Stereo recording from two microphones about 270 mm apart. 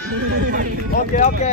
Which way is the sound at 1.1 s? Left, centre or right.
Left.